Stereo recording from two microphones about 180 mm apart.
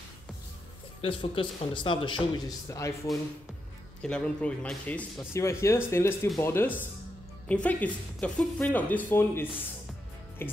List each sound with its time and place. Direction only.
1.0 s a man's voice: 30° left (ahead or behind)
4.0 s speech: 5° left (ahead or behind)